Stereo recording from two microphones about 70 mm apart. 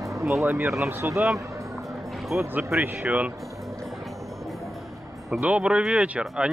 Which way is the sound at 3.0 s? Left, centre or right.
Centre.